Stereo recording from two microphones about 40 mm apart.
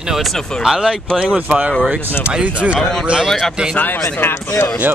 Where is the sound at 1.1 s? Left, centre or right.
Left.